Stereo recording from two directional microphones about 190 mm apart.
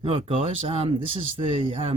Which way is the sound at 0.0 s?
30° right (ahead or behind).